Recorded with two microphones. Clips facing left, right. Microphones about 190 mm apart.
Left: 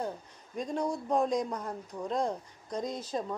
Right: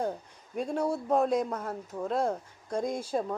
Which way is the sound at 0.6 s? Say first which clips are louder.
Right 3 dB; 10° right (ahead or behind).